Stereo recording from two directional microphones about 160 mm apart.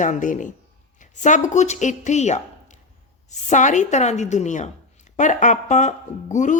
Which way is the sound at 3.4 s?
50° left (ahead or behind).